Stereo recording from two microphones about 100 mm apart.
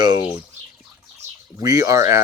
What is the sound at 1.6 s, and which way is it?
Speech, 35° right (ahead or behind).